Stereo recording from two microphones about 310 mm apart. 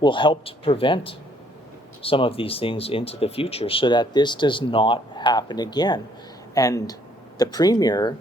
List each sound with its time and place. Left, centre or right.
0.0 s speech: centre